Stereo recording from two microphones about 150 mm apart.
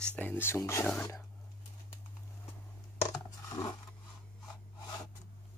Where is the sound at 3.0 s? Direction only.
25° left (ahead or behind).